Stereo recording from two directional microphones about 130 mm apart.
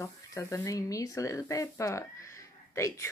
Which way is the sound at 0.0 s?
25° left (ahead or behind).